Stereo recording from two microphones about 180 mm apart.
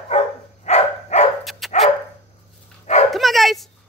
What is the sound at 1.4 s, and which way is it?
Dog, centre (ahead or behind).